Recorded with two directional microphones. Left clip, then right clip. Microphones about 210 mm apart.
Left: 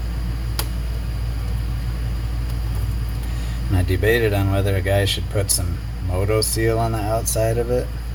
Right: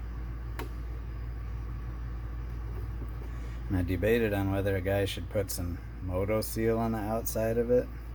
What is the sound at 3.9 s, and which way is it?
Speech, 50° right (ahead or behind).